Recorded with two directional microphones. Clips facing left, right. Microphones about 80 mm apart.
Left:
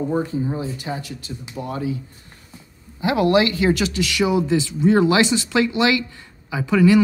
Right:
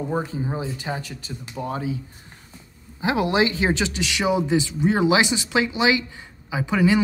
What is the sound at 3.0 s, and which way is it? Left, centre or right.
Speech, right.